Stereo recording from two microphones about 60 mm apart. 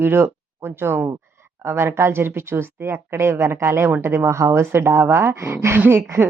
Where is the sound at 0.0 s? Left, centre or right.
Right.